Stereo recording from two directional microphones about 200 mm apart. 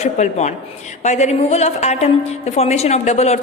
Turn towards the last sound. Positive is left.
turn(degrees=35)  # may be behind; listen again after turning